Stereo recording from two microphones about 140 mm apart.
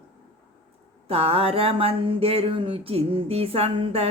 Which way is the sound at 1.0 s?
45° right (ahead or behind).